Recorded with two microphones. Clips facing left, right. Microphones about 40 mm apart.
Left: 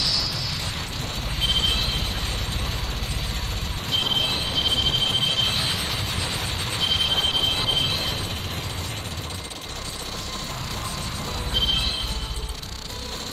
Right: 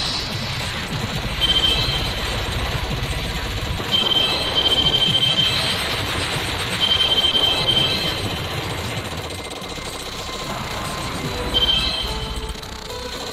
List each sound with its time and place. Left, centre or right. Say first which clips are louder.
0.0 s music: right 1 dB; right
1.4 s vehicle: right 5 dB; right
3.9 s train: right 5 dB; right
11.5 s train wheels squealing: right 5 dB; right